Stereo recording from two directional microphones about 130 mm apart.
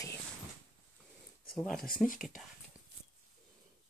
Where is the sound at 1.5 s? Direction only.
Centre (ahead or behind).